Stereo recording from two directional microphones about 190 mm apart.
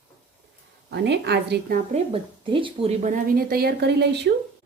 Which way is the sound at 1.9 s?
30° right (ahead or behind).